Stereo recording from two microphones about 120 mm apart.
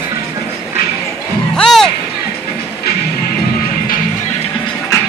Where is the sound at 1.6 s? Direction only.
5° left (ahead or behind).